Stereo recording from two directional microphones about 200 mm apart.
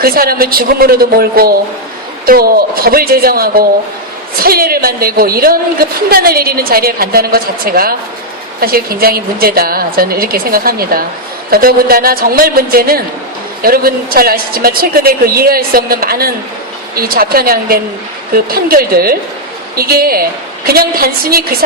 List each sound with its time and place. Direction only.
0.0 s a woman's voice: 50° right (ahead or behind)